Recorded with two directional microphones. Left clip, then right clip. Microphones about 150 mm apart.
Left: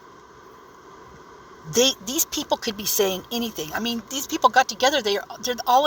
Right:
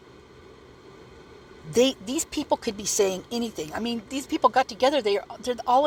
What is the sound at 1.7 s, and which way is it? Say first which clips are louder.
A man's voice: left 2 dB; 55° right (ahead or behind).